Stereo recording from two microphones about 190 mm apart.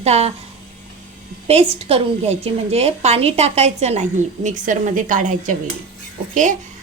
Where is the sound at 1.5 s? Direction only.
30° right (ahead or behind).